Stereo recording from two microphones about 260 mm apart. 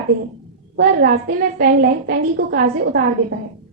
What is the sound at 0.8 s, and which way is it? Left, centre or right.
A woman's voice, right.